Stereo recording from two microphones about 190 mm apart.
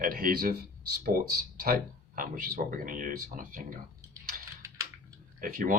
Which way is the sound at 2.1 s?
45° right (ahead or behind).